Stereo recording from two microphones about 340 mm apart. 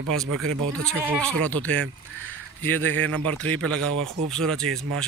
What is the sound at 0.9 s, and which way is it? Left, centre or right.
Speech, centre.